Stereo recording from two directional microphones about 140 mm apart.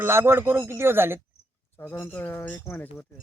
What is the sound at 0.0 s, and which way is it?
Speech, 20° right (ahead or behind).